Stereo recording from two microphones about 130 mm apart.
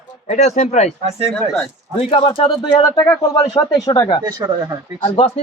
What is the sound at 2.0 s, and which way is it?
Speech, 45° left (ahead or behind).